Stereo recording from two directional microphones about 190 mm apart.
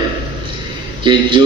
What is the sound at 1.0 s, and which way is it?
Speech, 25° right (ahead or behind).